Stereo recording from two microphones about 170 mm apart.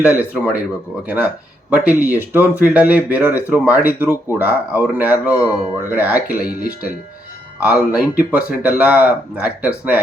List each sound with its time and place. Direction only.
0.0 s speech: 10° right (ahead or behind)
6.2 s speech: 60° left (ahead or behind)
7.6 s speech: 10° right (ahead or behind)